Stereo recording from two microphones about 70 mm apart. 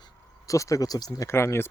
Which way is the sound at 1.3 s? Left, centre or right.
Left.